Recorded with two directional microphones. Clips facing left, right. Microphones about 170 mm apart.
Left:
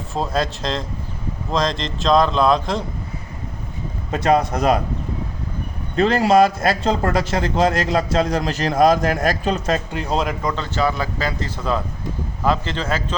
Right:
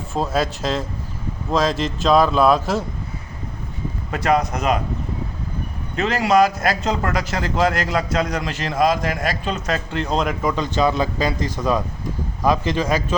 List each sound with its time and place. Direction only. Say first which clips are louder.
0.1 s speech: right 1 dB; centre (ahead or behind)
4.1 s a man's voice: left 2 dB; 25° left (ahead or behind)
6.0 s a man's voice: left 2 dB; 35° left (ahead or behind)
9.9 s speech: even; 5° left (ahead or behind)
10.5 s a man's voice: right 2 dB; 15° right (ahead or behind)